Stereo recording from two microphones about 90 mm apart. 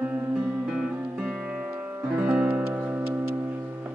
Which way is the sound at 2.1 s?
15° right (ahead or behind).